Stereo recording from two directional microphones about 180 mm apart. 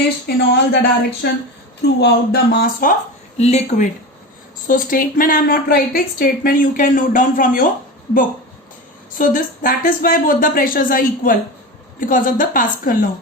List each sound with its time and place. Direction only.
0.3 s a woman's voice: 65° left (ahead or behind)
3.3 s a woman's voice: 35° left (ahead or behind)
4.7 s a woman's voice: 50° left (ahead or behind)
9.1 s a woman's voice: 50° left (ahead or behind)